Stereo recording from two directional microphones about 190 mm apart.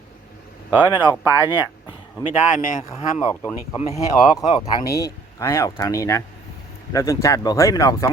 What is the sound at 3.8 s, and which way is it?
Speech, 35° left (ahead or behind).